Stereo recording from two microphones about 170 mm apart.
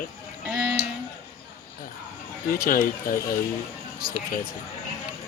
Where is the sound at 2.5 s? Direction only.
60° left (ahead or behind).